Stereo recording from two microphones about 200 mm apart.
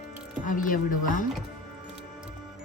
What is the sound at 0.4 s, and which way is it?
Speech, 40° left (ahead or behind).